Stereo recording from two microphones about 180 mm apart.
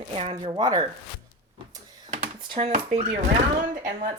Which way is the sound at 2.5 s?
35° right (ahead or behind).